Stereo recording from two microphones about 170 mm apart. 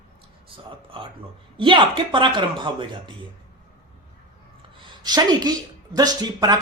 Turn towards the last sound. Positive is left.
turn(degrees=-20)  # may be behind; listen again after turning